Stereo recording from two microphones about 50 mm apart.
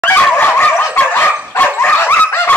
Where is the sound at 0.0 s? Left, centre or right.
Left.